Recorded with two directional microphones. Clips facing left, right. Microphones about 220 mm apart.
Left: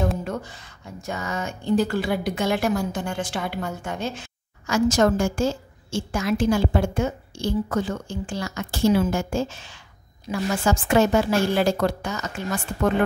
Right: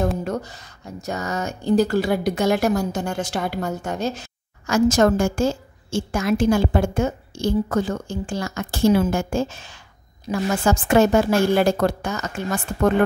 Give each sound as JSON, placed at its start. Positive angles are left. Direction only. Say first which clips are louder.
{"t": 0.2, "sound": "speech", "louder": "right 4 dB", "side_deg": -40}
{"t": 10.3, "sound": "a woman's voice", "louder": "right 3 dB", "side_deg": -35}
{"t": 10.6, "sound": "speech", "louder": "right 3 dB", "side_deg": -50}